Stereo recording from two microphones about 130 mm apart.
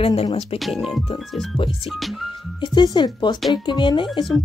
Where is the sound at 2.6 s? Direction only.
35° left (ahead or behind).